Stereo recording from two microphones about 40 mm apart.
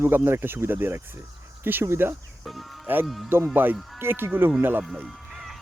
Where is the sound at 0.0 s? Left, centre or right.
Right.